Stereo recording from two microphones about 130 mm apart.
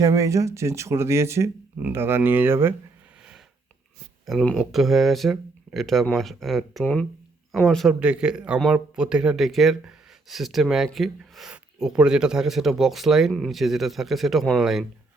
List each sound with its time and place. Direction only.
0.0 s speech: 25° right (ahead or behind)
4.3 s speech: centre (ahead or behind)
7.9 s speech: 10° right (ahead or behind)